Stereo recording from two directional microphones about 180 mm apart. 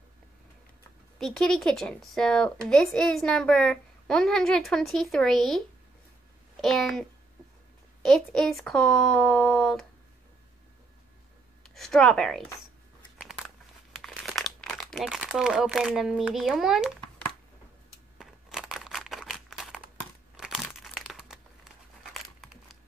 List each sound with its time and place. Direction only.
1.1 s a child's voice: 5° left (ahead or behind)
11.6 s speech: centre (ahead or behind)
13.9 s speech: centre (ahead or behind)
18.1 s a sound: centre (ahead or behind)
20.3 s crumpling: centre (ahead or behind)